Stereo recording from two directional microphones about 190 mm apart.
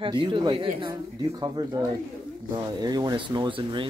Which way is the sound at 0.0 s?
25° right (ahead or behind).